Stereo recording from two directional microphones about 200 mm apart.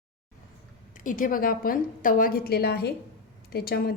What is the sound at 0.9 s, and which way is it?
A woman's voice, 40° left (ahead or behind).